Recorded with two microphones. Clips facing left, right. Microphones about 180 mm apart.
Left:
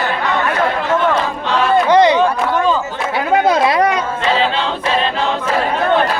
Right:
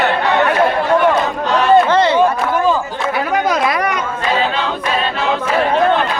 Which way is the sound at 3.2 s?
25° left (ahead or behind).